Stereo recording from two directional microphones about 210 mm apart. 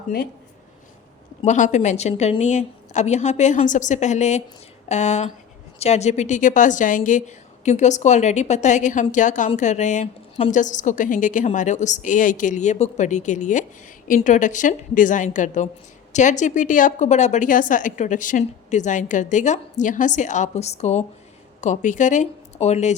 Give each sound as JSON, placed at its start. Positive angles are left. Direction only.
{"t": 1.5, "sound": "a woman's voice", "side_deg": 35}